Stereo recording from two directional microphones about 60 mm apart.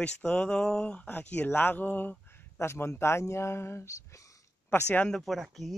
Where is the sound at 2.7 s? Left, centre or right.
Left.